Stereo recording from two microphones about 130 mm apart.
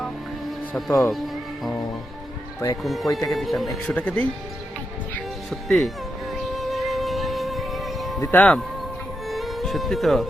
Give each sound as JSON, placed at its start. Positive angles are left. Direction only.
{"t": 0.9, "sound": "speech", "side_deg": 20}
{"t": 2.8, "sound": "speech", "side_deg": 0}
{"t": 3.8, "sound": "speech", "side_deg": 10}
{"t": 5.5, "sound": "speech", "side_deg": 5}
{"t": 6.5, "sound": "music", "side_deg": 0}
{"t": 8.2, "sound": "speech", "side_deg": 15}
{"t": 9.3, "sound": "music", "side_deg": 0}